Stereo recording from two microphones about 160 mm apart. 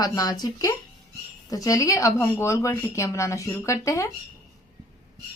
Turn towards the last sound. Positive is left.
turn(degrees=20)  # may be behind; listen again after turning